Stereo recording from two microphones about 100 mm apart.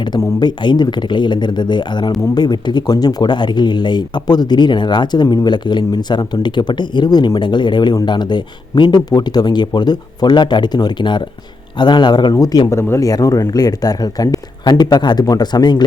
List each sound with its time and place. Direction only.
0.3 s speech: 50° left (ahead or behind)